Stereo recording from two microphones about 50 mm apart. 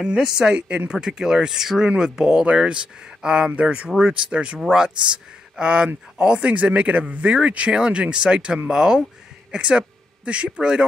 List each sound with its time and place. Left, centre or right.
0.0 s speech: centre
0.9 s speech: centre